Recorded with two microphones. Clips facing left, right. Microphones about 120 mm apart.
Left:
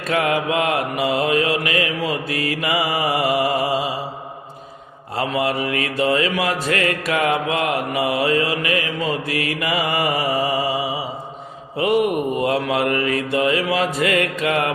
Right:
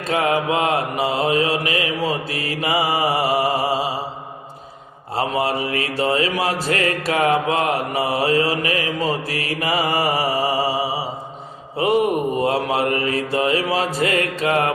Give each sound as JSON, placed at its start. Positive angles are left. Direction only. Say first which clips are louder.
{"t": 0.1, "sound": "mantra", "louder": "even", "side_deg": -30}
{"t": 5.1, "sound": "mantra", "louder": "even", "side_deg": -35}
{"t": 12.4, "sound": "mantra", "louder": "even", "side_deg": -35}